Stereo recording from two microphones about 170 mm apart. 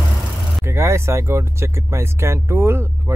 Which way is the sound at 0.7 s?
15° right (ahead or behind).